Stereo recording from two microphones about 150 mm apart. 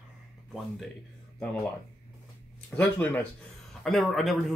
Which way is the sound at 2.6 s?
10° left (ahead or behind).